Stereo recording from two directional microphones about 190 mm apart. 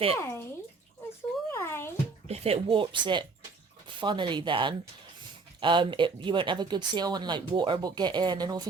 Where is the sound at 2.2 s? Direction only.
35° right (ahead or behind).